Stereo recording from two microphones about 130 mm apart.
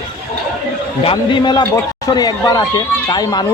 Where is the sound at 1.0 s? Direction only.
40° left (ahead or behind).